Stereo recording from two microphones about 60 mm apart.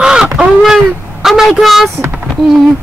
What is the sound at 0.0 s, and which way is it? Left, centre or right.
Crow, centre.